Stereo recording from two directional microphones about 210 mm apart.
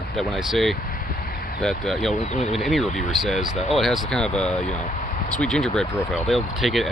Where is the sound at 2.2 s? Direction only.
35° left (ahead or behind).